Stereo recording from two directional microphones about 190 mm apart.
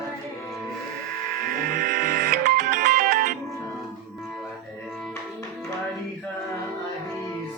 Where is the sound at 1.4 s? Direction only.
45° right (ahead or behind).